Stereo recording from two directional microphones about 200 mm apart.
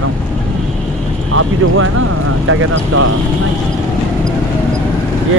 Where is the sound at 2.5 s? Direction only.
90° right.